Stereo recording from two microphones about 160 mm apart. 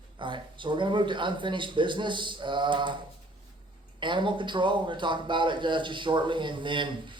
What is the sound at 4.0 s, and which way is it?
Speech, 30° right (ahead or behind).